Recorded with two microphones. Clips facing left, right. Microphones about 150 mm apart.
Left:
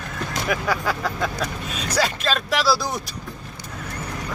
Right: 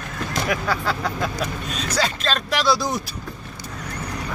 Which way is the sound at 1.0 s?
Centre (ahead or behind).